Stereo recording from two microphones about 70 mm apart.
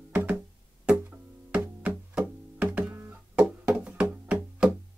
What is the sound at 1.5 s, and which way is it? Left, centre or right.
Music, centre.